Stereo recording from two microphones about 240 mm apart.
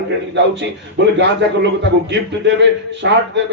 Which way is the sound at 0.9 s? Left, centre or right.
Right.